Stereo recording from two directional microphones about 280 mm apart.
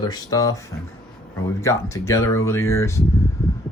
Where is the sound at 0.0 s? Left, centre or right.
Centre.